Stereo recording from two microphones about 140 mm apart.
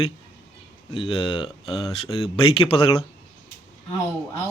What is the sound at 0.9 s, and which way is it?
Speech, 40° left (ahead or behind).